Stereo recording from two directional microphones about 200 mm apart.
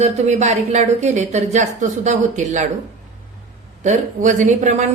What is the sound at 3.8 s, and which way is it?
A woman's voice, 35° right (ahead or behind).